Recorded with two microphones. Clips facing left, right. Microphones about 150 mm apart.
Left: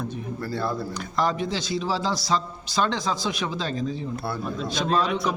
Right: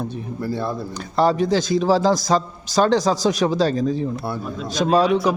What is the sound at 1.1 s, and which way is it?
A man's voice, 35° right (ahead or behind).